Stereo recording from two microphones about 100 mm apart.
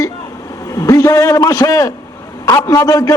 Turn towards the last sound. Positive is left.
turn(degrees=35)  # may be behind; listen again after turning